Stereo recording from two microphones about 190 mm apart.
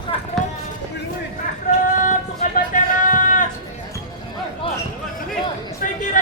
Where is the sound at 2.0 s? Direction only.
45° left (ahead or behind).